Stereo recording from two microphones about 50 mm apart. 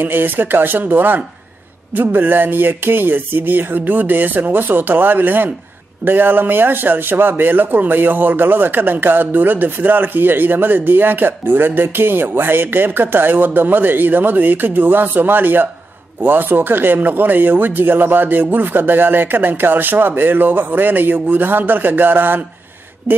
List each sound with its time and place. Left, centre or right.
0.0 s speech: right